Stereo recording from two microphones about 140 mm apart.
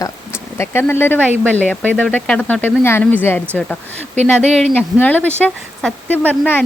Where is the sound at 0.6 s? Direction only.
15° left (ahead or behind).